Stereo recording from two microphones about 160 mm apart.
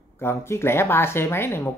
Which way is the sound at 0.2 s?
15° left (ahead or behind).